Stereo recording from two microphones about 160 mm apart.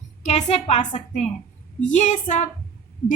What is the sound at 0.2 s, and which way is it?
A woman's voice, 45° left (ahead or behind).